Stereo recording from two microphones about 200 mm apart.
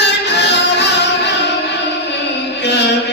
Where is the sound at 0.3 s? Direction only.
60° left (ahead or behind).